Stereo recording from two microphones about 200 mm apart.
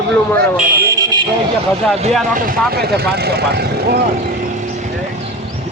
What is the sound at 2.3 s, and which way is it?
Speech, 50° right (ahead or behind).